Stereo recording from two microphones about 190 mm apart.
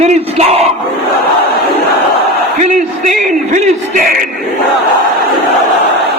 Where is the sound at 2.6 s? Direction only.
40° right (ahead or behind).